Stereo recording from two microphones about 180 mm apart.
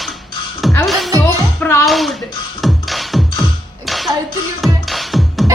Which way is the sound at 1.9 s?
Centre (ahead or behind).